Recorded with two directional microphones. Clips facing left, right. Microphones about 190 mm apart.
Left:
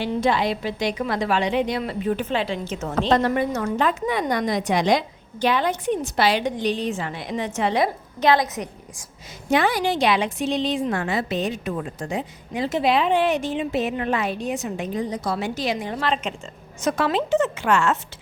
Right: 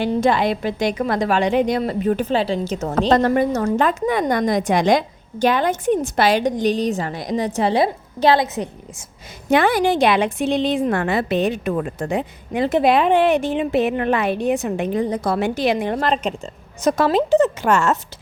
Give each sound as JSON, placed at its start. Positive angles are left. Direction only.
{"t": 0.0, "sound": "a woman's voice", "side_deg": -50}
{"t": 9.5, "sound": "a woman's voice", "side_deg": -55}
{"t": 16.0, "sound": "a woman's voice", "side_deg": -40}